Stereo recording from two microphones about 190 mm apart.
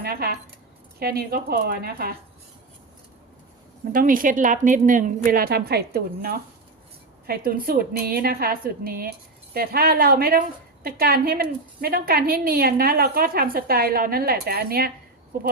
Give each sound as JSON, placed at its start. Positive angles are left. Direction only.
{"t": 0.0, "sound": "a woman's voice", "side_deg": -55}
{"t": 3.9, "sound": "a woman's voice", "side_deg": -45}